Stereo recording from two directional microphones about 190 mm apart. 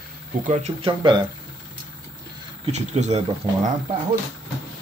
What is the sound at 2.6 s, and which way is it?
Speech, 35° right (ahead or behind).